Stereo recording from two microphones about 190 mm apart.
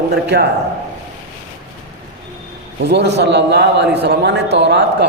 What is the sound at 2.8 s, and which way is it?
A man's voice, 60° right (ahead or behind).